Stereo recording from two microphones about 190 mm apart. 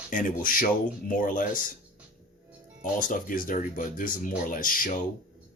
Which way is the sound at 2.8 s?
45° left (ahead or behind).